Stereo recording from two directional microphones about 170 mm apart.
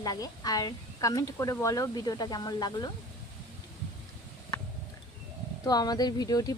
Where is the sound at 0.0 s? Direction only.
20° left (ahead or behind).